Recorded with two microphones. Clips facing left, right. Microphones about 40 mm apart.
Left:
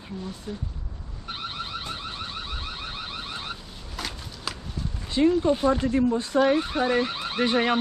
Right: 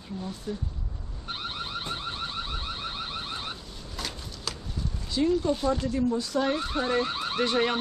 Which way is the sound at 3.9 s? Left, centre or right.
Centre.